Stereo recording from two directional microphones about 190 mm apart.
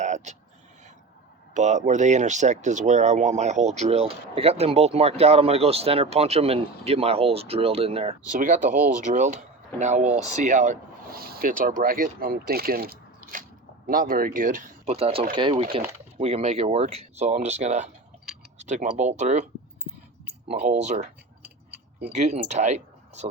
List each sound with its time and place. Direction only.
0.0 s a sound: 40° right (ahead or behind)
1.5 s speech: 40° right (ahead or behind)
8.3 s speech: 40° right (ahead or behind)
20.5 s speech: 40° right (ahead or behind)
22.1 s speech: 35° right (ahead or behind)